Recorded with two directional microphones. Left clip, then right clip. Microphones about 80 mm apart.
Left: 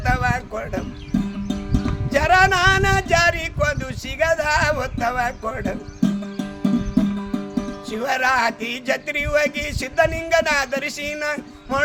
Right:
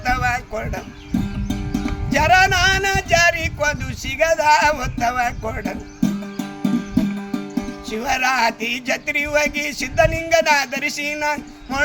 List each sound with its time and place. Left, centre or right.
0.0 s a sound: left
1.5 s music: centre
2.0 s music: left
6.0 s music: centre
7.9 s music: left